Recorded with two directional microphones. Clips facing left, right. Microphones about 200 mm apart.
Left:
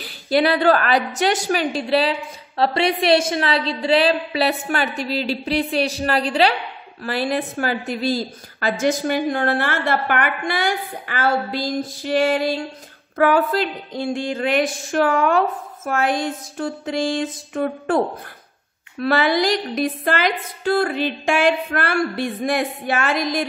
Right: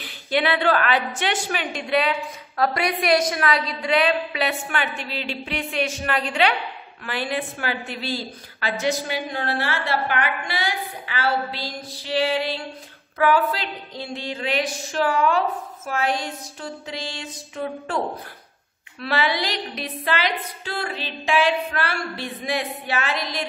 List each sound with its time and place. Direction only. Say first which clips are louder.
0.0 s a woman's voice: left 5 dB; 40° left (ahead or behind)